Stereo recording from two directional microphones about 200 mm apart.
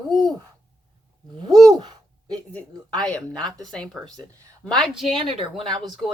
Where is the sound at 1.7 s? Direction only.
20° right (ahead or behind).